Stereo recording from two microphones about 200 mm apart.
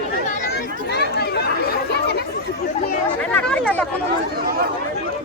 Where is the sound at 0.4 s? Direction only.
55° left (ahead or behind).